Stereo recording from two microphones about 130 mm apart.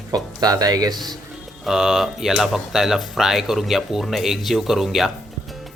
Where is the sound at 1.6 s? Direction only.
5° right (ahead or behind).